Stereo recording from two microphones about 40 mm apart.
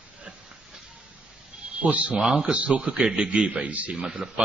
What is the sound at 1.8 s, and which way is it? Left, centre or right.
Speech, right.